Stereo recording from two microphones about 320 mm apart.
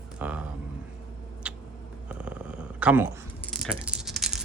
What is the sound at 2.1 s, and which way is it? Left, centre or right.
Purr, centre.